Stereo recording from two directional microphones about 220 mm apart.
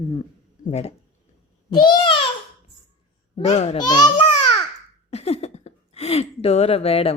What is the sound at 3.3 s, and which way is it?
Speech, 30° left (ahead or behind).